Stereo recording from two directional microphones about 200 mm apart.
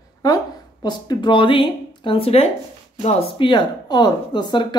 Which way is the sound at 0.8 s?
20° left (ahead or behind).